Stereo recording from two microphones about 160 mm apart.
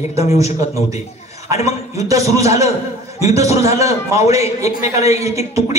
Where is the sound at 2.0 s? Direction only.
20° right (ahead or behind).